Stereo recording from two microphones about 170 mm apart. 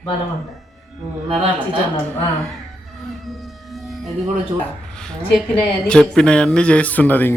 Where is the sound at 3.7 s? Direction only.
Centre (ahead or behind).